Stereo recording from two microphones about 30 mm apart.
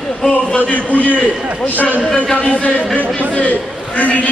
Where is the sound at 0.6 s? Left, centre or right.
Left.